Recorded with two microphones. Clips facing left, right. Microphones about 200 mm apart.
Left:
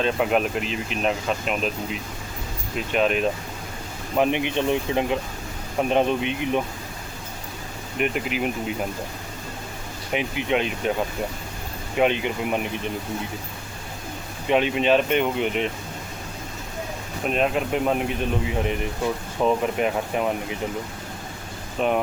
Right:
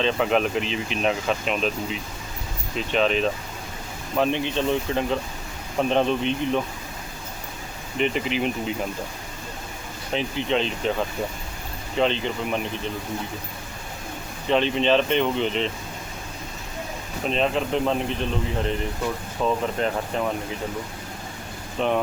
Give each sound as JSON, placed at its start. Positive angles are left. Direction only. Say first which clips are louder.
{"t": 0.0, "sound": "speech", "louder": "even", "side_deg": 5}
{"t": 7.9, "sound": "speech", "louder": "right 1 dB", "side_deg": 5}
{"t": 10.1, "sound": "speech", "louder": "left 1 dB", "side_deg": 10}
{"t": 11.9, "sound": "speech", "louder": "left 2 dB", "side_deg": 10}
{"t": 14.4, "sound": "speech", "louder": "left 1 dB", "side_deg": 10}
{"t": 17.2, "sound": "speech", "louder": "left 1 dB", "side_deg": 5}
{"t": 21.8, "sound": "speech", "louder": "left 1 dB", "side_deg": 10}